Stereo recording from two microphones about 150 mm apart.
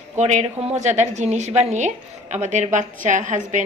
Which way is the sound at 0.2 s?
50° right (ahead or behind).